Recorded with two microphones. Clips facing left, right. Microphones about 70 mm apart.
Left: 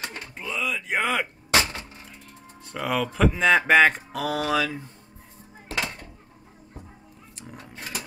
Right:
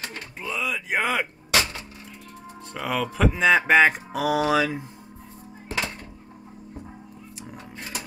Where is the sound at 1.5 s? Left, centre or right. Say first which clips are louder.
Left 1 dB; left.